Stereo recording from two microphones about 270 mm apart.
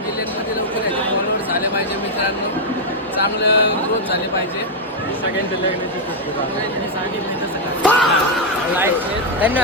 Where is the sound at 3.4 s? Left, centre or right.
Left.